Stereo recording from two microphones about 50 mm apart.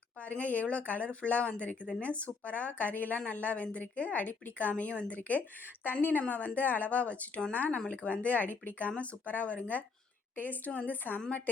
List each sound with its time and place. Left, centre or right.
0.2 s speech: left
5.8 s a woman's voice: left